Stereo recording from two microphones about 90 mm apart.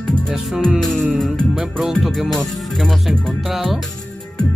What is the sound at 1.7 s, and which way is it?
Music, centre (ahead or behind).